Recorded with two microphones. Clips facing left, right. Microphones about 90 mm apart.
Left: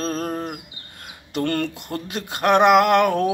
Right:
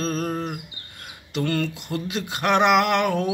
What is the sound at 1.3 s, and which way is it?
Male singing, 50° left (ahead or behind).